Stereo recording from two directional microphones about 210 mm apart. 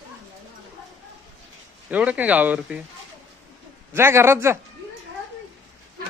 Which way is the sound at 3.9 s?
10° right (ahead or behind).